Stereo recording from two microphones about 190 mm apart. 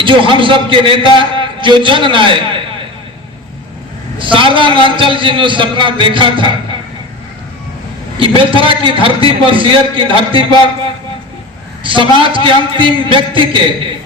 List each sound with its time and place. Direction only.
0.0 s a man's voice: 25° right (ahead or behind)
4.2 s a man's voice: 25° right (ahead or behind)
8.4 s a man's voice: 25° right (ahead or behind)
11.8 s a man's voice: 25° right (ahead or behind)